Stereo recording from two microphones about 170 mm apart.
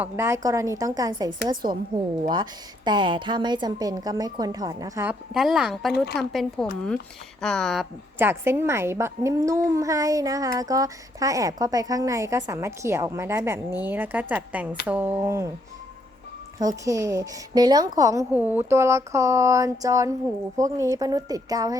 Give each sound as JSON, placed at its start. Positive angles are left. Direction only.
{"t": 0.0, "sound": "a child's voice", "side_deg": -15}
{"t": 5.3, "sound": "speech", "side_deg": 0}
{"t": 8.2, "sound": "a child's voice", "side_deg": -15}
{"t": 16.6, "sound": "a child's voice", "side_deg": -20}